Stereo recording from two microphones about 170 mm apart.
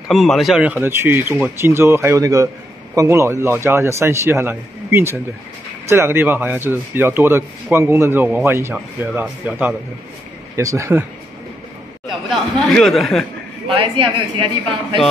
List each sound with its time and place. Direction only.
0.1 s speech: centre (ahead or behind)
12.3 s a sound: centre (ahead or behind)
13.7 s speech: 30° right (ahead or behind)